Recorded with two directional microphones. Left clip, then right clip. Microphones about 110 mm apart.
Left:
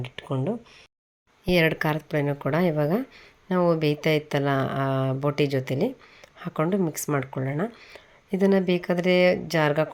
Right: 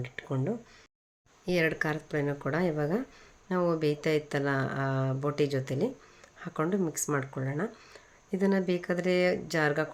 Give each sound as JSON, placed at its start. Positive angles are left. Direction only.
{"t": 0.0, "sound": "speech", "side_deg": 30}
{"t": 1.5, "sound": "speech", "side_deg": 55}